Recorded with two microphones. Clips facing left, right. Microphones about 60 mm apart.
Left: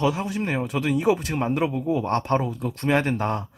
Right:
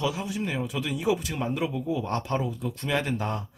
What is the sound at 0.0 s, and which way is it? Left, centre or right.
A man's voice, left.